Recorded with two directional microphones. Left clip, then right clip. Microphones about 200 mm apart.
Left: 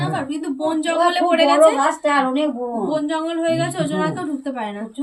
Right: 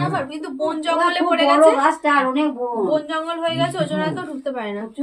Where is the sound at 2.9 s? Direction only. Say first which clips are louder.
Left 1 dB; 10° right (ahead or behind).